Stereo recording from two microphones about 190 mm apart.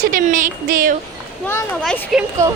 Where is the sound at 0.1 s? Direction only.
45° right (ahead or behind).